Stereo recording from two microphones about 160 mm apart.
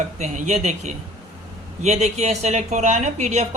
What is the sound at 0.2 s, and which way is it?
A man's voice, 45° right (ahead or behind).